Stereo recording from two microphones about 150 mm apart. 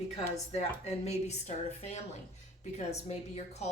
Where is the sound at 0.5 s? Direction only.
45° left (ahead or behind).